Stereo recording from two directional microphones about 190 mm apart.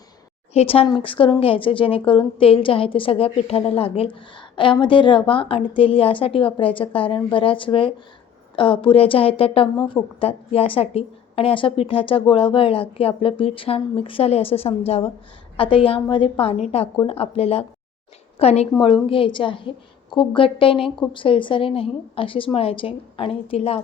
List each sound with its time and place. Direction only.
0.5 s a woman's voice: 30° left (ahead or behind)